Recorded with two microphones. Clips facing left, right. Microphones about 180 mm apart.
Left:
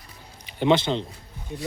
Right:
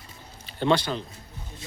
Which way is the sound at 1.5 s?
65° left (ahead or behind).